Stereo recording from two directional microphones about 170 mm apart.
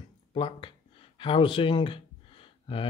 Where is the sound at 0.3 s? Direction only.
30° left (ahead or behind).